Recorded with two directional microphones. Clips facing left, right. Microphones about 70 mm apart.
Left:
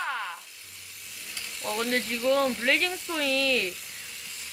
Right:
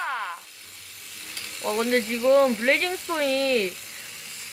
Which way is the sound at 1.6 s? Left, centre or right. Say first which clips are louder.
Right 5 dB; right.